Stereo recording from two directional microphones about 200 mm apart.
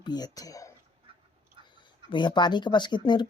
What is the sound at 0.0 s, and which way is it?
Speech, 20° left (ahead or behind).